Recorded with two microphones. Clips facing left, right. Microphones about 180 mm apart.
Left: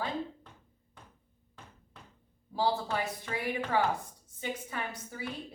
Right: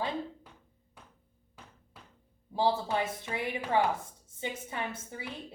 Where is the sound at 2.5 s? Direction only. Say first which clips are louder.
Right 2 dB; 20° right (ahead or behind).